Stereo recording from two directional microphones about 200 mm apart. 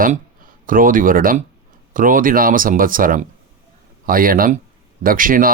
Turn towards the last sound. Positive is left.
turn(degrees=-45)  # may be behind; listen again after turning